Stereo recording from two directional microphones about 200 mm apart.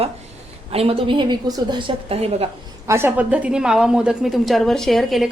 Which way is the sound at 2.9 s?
15° right (ahead or behind).